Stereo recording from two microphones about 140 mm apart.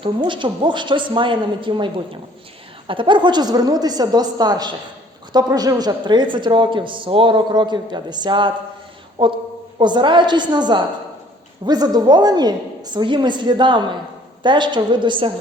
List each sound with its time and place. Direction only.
0.0 s a woman's voice: 35° right (ahead or behind)